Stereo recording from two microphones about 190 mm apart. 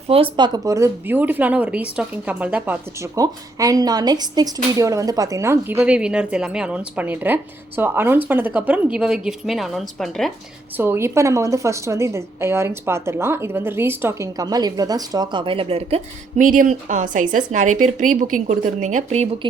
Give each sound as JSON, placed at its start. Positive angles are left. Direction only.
{"t": 0.1, "sound": "a woman's voice", "side_deg": -25}
{"t": 10.8, "sound": "speech", "side_deg": -10}
{"t": 16.4, "sound": "a woman's voice", "side_deg": -45}